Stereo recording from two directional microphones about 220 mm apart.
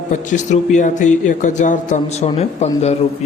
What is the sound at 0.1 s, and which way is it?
Speech, 35° left (ahead or behind).